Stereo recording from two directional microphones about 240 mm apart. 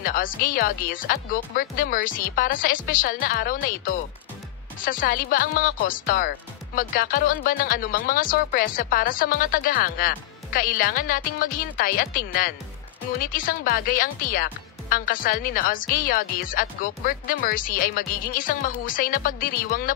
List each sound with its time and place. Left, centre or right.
0.0 s speech: left